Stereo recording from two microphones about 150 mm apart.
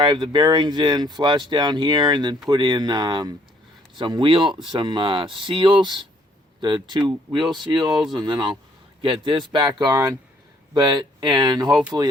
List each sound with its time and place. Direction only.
0.0 s a man's voice: 30° right (ahead or behind)